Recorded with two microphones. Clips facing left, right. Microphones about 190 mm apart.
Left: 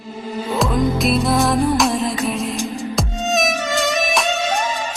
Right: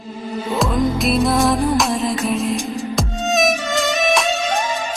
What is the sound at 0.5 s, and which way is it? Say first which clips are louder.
Music: even; centre (ahead or behind).